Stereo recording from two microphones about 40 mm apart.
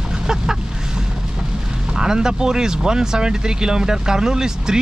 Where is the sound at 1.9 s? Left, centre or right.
Centre.